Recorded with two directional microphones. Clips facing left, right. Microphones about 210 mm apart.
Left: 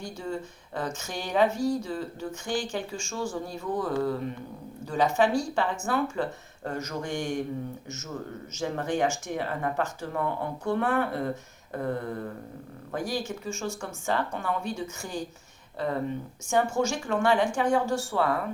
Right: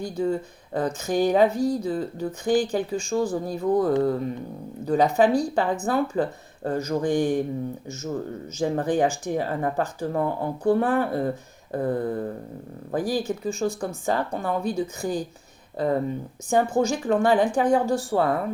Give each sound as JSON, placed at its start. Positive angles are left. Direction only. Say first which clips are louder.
{"t": 0.0, "sound": "speech", "louder": "right 8 dB", "side_deg": -35}
{"t": 16.5, "sound": "speech", "louder": "right 4 dB", "side_deg": -35}